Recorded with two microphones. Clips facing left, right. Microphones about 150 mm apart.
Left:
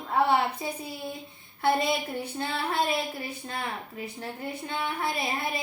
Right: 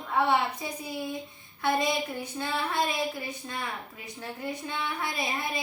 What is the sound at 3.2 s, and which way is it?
A woman's voice, 30° left (ahead or behind).